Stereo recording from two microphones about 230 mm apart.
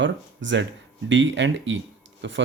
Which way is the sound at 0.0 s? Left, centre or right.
Right.